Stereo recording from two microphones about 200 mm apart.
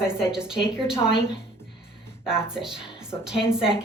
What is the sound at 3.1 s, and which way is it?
Speech, 20° left (ahead or behind).